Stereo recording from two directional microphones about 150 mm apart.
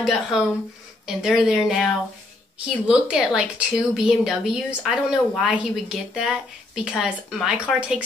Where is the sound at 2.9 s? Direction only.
5° right (ahead or behind).